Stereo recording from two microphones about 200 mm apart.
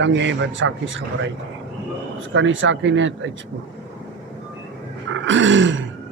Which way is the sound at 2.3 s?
70° right (ahead or behind).